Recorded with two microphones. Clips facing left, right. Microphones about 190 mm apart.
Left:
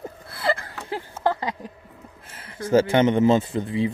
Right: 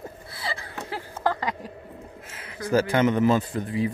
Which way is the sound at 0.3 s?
55° left (ahead or behind).